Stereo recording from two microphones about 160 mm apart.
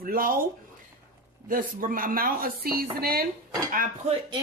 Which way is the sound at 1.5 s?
60° right (ahead or behind).